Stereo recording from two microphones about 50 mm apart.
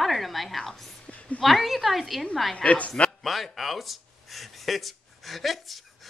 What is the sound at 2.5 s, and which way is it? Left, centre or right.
Speech, left.